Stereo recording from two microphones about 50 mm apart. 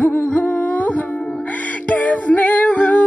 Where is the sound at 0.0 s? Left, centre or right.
Left.